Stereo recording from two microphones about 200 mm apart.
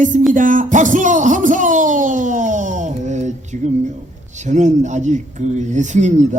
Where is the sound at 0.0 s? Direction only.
40° right (ahead or behind).